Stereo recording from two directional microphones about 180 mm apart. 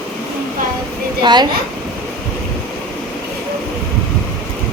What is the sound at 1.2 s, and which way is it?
Speech, 25° right (ahead or behind).